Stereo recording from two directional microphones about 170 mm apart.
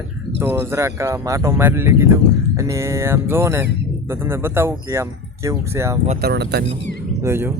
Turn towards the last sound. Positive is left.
turn(degrees=-15)  # may be behind; listen again after turning